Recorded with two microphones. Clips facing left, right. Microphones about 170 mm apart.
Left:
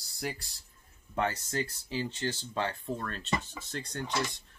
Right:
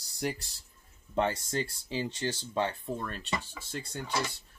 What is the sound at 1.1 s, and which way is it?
Speech, 25° right (ahead or behind).